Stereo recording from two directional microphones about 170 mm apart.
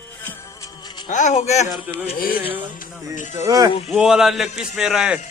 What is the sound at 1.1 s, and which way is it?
Speech, 45° left (ahead or behind).